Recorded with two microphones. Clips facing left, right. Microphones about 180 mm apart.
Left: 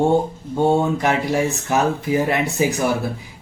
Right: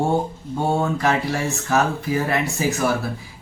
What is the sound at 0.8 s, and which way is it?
Speech, 20° left (ahead or behind).